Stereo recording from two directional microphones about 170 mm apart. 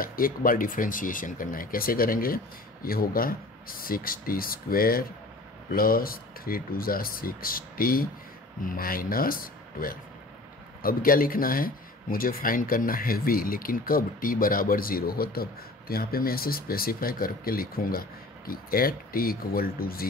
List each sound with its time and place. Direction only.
0.0 s speech: 55° left (ahead or behind)